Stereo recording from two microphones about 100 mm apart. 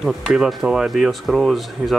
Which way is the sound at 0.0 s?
5° right (ahead or behind).